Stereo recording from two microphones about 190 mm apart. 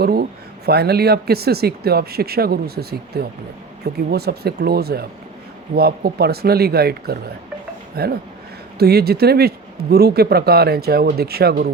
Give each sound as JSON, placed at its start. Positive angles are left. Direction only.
{"t": 0.0, "sound": "speech", "side_deg": -55}